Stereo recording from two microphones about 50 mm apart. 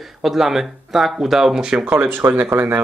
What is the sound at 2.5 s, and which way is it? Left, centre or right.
Speech, right.